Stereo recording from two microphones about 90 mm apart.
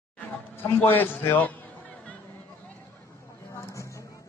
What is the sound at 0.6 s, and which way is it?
A man's voice, 20° left (ahead or behind).